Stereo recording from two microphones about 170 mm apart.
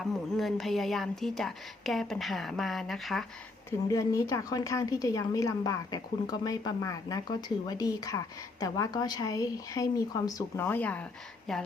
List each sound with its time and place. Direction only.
0.0 s a woman's voice: centre (ahead or behind)
3.7 s a woman's voice: 20° left (ahead or behind); by 11.6 s centre (ahead or behind)